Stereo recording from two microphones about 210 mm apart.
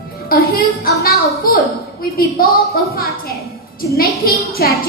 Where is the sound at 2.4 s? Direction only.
45° left (ahead or behind).